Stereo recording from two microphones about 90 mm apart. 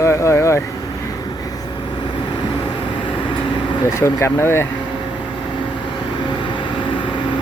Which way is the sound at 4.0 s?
30° left (ahead or behind).